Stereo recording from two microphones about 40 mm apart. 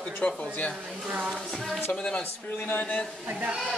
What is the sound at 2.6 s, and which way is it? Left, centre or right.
Speech, left.